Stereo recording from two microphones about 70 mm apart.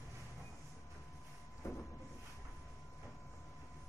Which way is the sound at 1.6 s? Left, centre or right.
Left.